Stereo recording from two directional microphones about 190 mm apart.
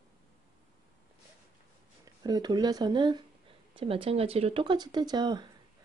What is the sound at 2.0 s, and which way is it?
Speech, 20° right (ahead or behind).